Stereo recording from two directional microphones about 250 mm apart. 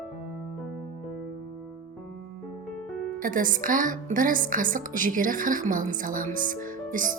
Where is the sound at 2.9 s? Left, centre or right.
Centre.